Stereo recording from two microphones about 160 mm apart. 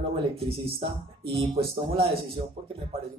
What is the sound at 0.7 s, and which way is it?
Speech, 35° right (ahead or behind).